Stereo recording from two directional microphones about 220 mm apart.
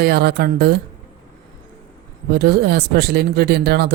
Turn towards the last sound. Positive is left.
turn(degrees=-45)  # may be behind; listen again after turning